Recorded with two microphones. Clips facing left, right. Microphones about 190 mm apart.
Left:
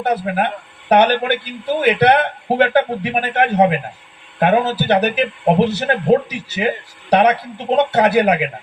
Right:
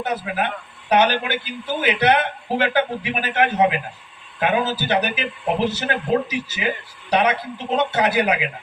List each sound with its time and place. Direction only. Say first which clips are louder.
0.0 s speech: left 5 dB; 60° left (ahead or behind)